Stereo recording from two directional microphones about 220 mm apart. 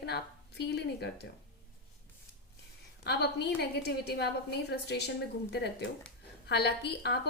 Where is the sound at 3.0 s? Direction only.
50° left (ahead or behind).